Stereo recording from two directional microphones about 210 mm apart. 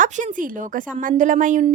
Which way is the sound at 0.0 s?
35° right (ahead or behind).